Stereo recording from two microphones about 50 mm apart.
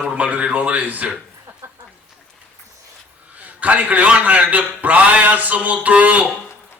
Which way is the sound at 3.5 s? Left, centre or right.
Right.